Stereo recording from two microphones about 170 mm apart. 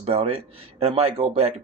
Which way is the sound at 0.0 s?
35° right (ahead or behind).